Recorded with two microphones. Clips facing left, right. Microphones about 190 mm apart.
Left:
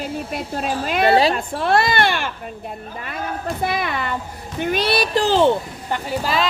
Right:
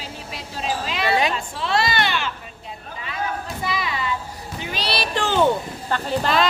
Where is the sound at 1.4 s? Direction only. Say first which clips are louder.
Left 5 dB; 55° left (ahead or behind); by 5.5 s 30° left (ahead or behind).